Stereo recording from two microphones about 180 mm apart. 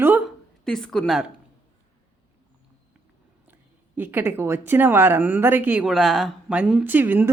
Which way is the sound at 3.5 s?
10° right (ahead or behind).